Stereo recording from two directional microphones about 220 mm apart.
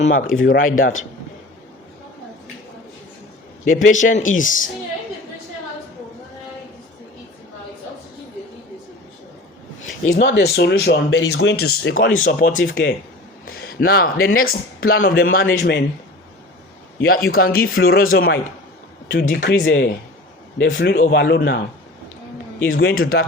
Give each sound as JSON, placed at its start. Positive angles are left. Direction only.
{"t": 0.0, "sound": "speech", "side_deg": 40}
{"t": 3.7, "sound": "speech", "side_deg": 35}
{"t": 9.8, "sound": "speech", "side_deg": 55}
{"t": 13.5, "sound": "a sound", "side_deg": 45}
{"t": 14.8, "sound": "speech", "side_deg": 45}
{"t": 17.0, "sound": "speech", "side_deg": 45}
{"t": 19.3, "sound": "speech", "side_deg": 55}
{"t": 19.6, "sound": "speech", "side_deg": 40}
{"t": 20.7, "sound": "speech", "side_deg": 55}
{"t": 22.6, "sound": "speech", "side_deg": 50}